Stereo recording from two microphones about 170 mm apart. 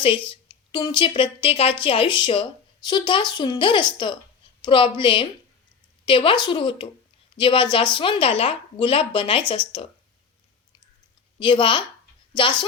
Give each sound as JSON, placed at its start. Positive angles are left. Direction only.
{"t": 0.3, "sound": "a woman's voice", "side_deg": 25}
{"t": 11.3, "sound": "a woman's voice", "side_deg": 30}